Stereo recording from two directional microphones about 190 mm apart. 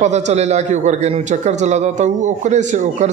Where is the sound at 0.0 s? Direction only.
35° right (ahead or behind).